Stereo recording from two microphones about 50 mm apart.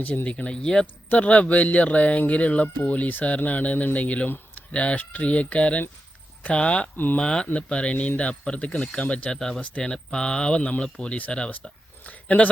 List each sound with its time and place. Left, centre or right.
0.3 s speech: left
6.9 s speech: left
7.2 s speech: centre